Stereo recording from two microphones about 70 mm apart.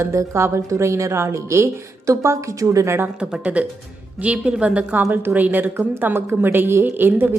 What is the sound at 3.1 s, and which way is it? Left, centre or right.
A woman's voice, centre.